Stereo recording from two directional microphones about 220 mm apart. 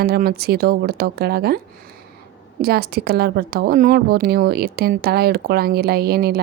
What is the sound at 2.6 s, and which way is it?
A woman's voice, 45° right (ahead or behind).